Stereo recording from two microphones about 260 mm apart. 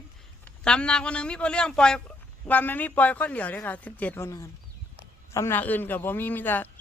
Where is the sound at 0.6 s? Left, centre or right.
Centre.